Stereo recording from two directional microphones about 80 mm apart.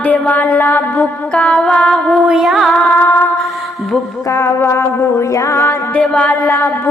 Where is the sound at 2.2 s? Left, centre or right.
Centre.